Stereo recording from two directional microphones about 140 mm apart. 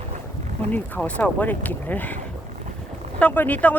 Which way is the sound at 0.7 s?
10° left (ahead or behind).